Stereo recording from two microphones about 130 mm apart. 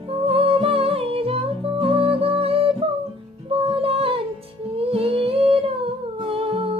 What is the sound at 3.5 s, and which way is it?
Female singing, 45° right (ahead or behind).